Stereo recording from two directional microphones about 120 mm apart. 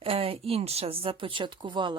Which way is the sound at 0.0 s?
50° right (ahead or behind).